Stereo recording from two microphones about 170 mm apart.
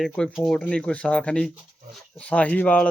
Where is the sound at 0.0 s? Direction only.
5° left (ahead or behind).